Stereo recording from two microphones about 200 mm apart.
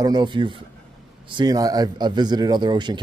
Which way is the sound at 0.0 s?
20° right (ahead or behind).